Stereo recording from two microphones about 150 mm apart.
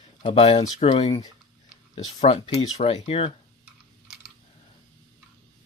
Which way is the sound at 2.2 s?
40° left (ahead or behind).